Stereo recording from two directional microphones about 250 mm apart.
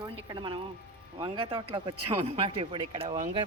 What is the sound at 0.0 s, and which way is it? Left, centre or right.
Speech, centre.